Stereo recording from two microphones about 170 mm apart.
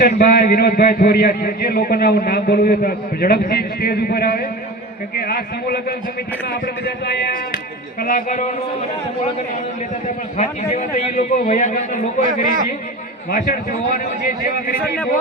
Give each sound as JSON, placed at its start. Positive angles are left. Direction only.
{"t": 0.0, "sound": "a man's voice", "side_deg": 60}
{"t": 6.5, "sound": "speech", "side_deg": 75}
{"t": 8.0, "sound": "a man's voice", "side_deg": 50}
{"t": 10.3, "sound": "a man's voice", "side_deg": 45}
{"t": 13.3, "sound": "a man's voice", "side_deg": 50}